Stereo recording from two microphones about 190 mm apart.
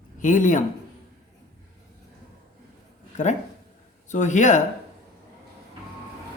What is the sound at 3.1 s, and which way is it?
Speech, 40° left (ahead or behind).